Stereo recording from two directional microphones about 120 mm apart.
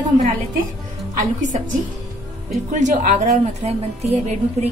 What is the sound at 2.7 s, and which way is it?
A woman's voice, 90° right.